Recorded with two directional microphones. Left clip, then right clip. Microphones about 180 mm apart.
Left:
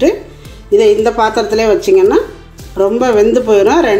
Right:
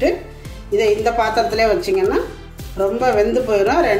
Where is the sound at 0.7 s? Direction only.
30° left (ahead or behind).